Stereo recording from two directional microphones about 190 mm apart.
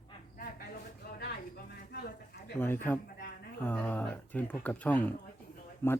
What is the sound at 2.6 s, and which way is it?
Speech, 10° left (ahead or behind).